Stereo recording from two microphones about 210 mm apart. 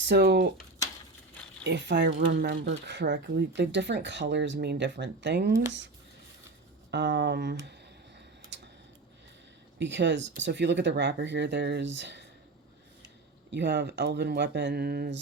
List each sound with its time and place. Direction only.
0.0 s speech: 55° right (ahead or behind)
1.6 s speech: 55° right (ahead or behind)
6.9 s speech: 55° right (ahead or behind)
9.7 s speech: 55° right (ahead or behind)
13.5 s speech: 55° right (ahead or behind)